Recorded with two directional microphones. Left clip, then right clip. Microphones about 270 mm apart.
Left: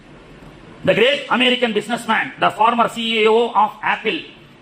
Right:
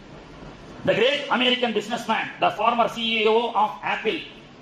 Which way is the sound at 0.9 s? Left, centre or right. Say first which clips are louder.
Left 5 dB; left.